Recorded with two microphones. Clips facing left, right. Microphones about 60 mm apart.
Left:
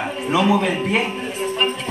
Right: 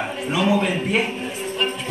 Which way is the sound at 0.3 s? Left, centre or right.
Centre.